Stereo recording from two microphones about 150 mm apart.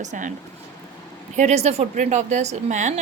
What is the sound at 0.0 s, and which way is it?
Speech, 55° right (ahead or behind).